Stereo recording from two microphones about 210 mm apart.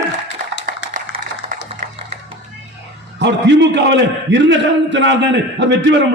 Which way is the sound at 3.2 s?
55° right (ahead or behind).